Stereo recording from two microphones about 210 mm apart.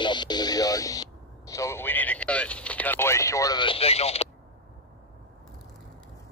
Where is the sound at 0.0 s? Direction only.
20° left (ahead or behind).